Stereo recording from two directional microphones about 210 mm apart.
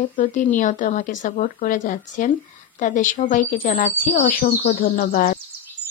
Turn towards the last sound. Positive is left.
turn(degrees=40)  # may be behind; listen again after turning